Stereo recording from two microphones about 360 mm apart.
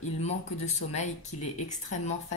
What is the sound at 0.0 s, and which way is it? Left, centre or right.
Speech, centre.